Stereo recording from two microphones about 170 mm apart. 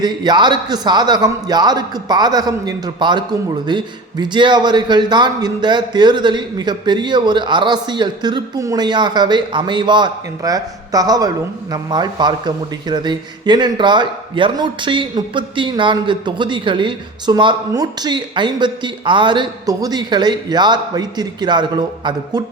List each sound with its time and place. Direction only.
0.0 s a man's voice: 25° right (ahead or behind)